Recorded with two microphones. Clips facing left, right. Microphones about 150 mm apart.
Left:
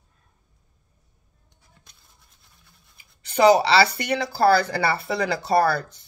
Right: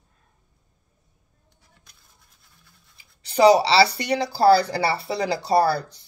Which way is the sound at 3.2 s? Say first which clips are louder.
Right 1 dB; 35° right (ahead or behind).